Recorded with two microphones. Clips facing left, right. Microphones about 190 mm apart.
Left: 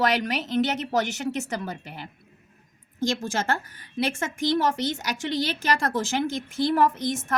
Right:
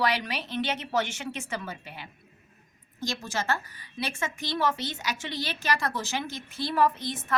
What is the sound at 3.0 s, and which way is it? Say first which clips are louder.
A woman's voice: left 6 dB; 50° left (ahead or behind).